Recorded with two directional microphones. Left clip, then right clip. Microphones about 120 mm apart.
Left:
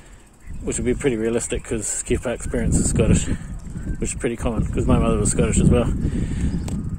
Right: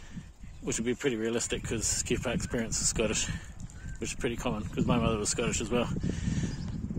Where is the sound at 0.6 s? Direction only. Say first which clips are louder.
Left 9 dB; 25° right (ahead or behind).